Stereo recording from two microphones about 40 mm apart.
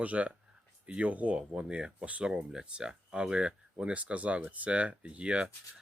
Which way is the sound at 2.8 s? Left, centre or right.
Right.